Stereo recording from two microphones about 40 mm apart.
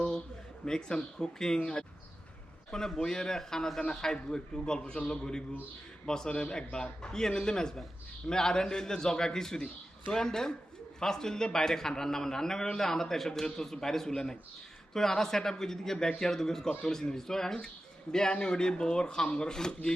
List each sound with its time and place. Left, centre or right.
0.6 s a man's voice: centre